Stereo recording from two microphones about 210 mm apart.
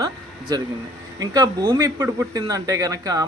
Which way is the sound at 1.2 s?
20° right (ahead or behind).